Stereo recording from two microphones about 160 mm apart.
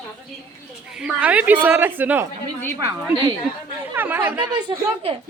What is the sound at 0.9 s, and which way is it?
A woman's voice, 5° right (ahead or behind).